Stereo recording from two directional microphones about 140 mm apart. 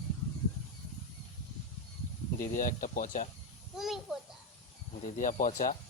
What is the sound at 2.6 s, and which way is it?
Speech, 70° left (ahead or behind).